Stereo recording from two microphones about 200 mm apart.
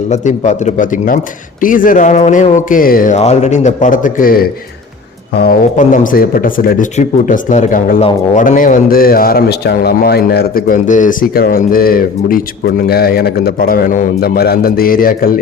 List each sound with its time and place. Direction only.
0.1 s a man's voice: 35° left (ahead or behind)